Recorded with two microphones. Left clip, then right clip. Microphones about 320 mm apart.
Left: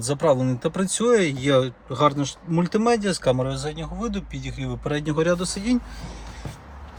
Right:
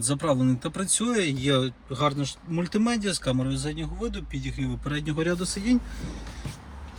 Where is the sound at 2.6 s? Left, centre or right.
Left.